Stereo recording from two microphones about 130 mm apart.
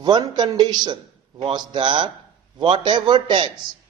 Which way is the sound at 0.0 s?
35° right (ahead or behind).